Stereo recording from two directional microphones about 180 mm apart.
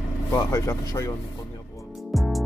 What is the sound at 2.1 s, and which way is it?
Music, centre (ahead or behind).